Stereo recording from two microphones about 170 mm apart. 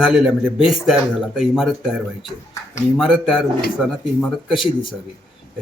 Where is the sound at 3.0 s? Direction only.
5° right (ahead or behind).